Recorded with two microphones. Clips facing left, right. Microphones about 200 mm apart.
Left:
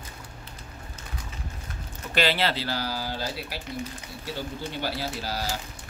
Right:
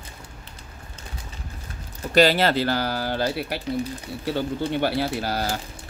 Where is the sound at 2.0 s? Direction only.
40° right (ahead or behind).